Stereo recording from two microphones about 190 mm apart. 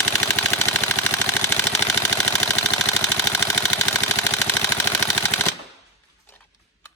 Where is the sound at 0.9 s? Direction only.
15° left (ahead or behind).